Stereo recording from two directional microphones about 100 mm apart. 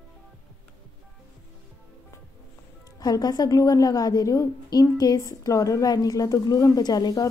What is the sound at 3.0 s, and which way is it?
A woman's voice, 40° left (ahead or behind).